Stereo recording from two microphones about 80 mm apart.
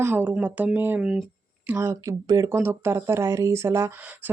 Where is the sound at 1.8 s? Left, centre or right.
Right.